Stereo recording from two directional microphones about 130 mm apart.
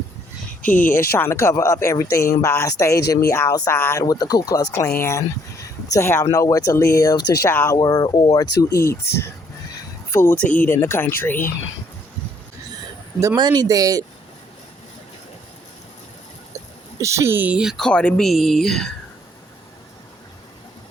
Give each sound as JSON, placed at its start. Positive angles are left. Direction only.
{"t": 0.6, "sound": "speech", "side_deg": 90}
{"t": 0.9, "sound": "speech", "side_deg": 20}
{"t": 4.0, "sound": "speech", "side_deg": 30}
{"t": 7.5, "sound": "speech", "side_deg": 15}
{"t": 7.8, "sound": "speech", "side_deg": 30}
{"t": 13.3, "sound": "speech", "side_deg": -35}
{"t": 17.0, "sound": "speech", "side_deg": -20}